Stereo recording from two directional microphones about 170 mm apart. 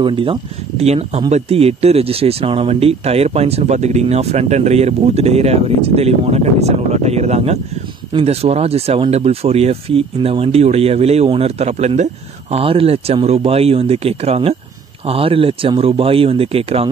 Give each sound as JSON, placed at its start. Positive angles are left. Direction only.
{"t": 0.0, "sound": "speech", "side_deg": -30}